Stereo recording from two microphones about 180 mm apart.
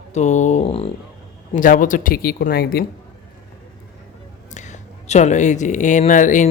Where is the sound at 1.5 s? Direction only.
45° left (ahead or behind).